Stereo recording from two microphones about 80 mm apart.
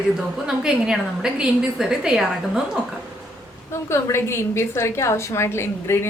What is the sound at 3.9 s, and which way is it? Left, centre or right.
A woman's voice, left.